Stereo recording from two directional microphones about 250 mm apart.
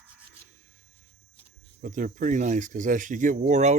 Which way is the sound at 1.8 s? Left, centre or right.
Right.